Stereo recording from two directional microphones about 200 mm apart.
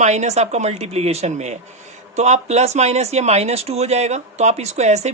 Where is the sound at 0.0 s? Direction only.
35° right (ahead or behind).